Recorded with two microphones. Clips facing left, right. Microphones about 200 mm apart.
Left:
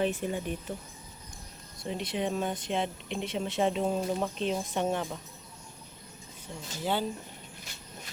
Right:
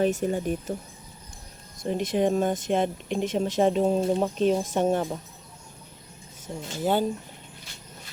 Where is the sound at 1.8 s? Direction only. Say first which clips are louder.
Right 8 dB; 50° right (ahead or behind); by 4.3 s 30° right (ahead or behind).